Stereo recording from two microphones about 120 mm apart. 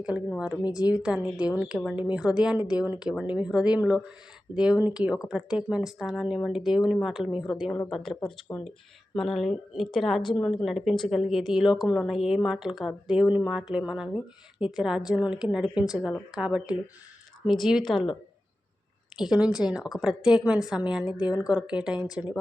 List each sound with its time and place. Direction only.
0.3 s a woman's voice: 5° right (ahead or behind)
19.1 s a woman's voice: 5° right (ahead or behind)